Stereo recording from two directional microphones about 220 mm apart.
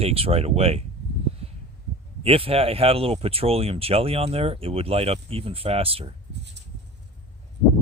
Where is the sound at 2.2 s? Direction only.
25° right (ahead or behind).